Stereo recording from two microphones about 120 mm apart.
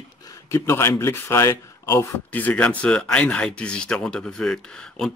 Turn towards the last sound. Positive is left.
turn(degrees=5)  # may be behind; listen again after turning